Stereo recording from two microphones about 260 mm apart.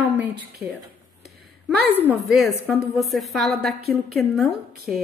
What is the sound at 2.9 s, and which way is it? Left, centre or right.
A woman's voice, centre.